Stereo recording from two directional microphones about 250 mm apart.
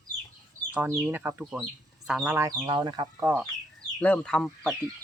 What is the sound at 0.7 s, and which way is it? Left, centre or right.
Speech, centre.